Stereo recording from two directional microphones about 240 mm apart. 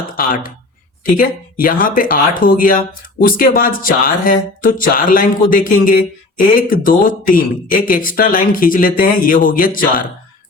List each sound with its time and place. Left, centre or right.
0.0 s speech: left